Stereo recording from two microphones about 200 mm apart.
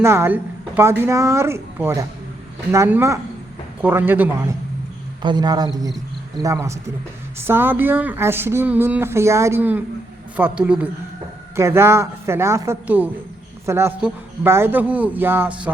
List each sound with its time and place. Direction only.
0.0 s speech: 10° right (ahead or behind)
5.2 s a man's voice: 20° right (ahead or behind)